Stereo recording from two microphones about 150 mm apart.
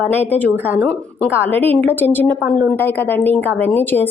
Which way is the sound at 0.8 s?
5° left (ahead or behind).